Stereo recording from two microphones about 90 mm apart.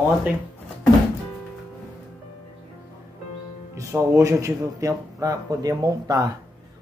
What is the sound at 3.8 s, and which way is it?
Speech, 35° right (ahead or behind).